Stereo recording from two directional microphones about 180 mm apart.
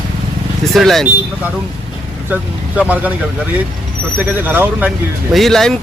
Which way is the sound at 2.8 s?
10° right (ahead or behind).